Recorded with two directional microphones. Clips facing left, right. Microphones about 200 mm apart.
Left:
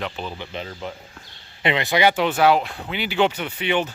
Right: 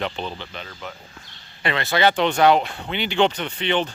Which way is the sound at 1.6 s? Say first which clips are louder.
Left 1 dB; 15° left (ahead or behind).